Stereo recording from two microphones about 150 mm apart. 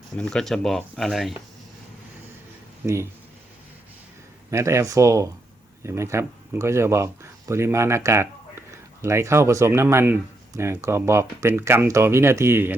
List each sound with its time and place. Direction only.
0.2 s speech: 5° left (ahead or behind)
2.8 s speech: 20° right (ahead or behind)
4.5 s speech: 20° right (ahead or behind)